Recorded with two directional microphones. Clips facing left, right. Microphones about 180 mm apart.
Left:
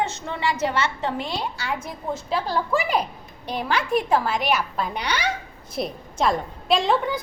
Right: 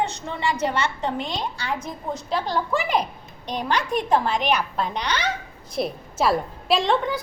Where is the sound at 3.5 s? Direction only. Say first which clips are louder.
Left 1 dB; 5° left (ahead or behind).